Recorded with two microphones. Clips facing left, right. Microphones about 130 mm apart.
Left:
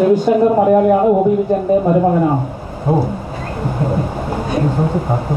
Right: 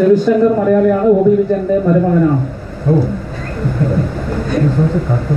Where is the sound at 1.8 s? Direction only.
30° left (ahead or behind).